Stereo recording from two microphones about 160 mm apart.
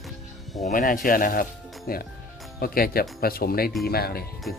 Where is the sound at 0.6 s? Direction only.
60° left (ahead or behind).